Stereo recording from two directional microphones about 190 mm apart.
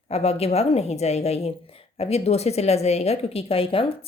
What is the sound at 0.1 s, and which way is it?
A woman's voice, 30° left (ahead or behind).